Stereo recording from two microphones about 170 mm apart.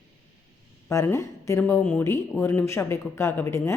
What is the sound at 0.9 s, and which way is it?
Speech, 15° left (ahead or behind).